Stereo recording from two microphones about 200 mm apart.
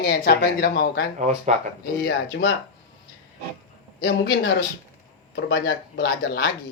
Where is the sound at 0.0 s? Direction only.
50° left (ahead or behind).